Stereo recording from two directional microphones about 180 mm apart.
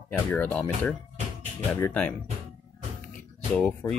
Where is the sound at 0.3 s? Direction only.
10° left (ahead or behind).